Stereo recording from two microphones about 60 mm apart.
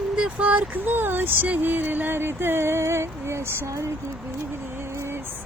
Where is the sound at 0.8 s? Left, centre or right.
Right.